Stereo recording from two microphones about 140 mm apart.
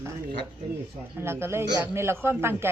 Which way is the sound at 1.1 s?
15° right (ahead or behind).